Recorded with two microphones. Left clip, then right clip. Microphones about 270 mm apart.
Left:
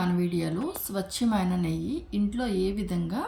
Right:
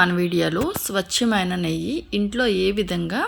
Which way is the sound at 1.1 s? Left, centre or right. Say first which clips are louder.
Right 6 dB; centre.